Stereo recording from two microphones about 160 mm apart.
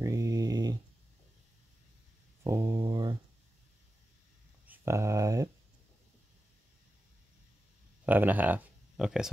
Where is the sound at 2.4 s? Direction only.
20° right (ahead or behind).